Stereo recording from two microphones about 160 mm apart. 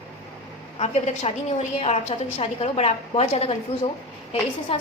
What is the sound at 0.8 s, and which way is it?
A woman's voice, 45° left (ahead or behind).